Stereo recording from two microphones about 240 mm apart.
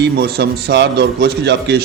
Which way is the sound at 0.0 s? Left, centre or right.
Right.